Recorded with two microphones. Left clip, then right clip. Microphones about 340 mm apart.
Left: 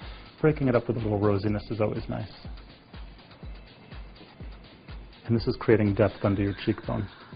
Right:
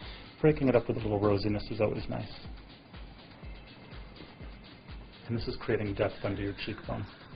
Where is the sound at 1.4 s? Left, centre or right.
Left.